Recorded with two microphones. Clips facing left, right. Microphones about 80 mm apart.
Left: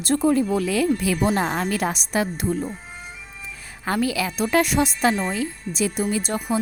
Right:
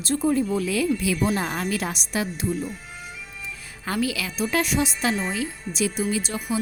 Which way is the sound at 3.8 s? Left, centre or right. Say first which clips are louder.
Left 3 dB; left.